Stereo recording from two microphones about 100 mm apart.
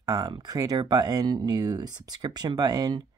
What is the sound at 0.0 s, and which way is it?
Speech, 40° right (ahead or behind).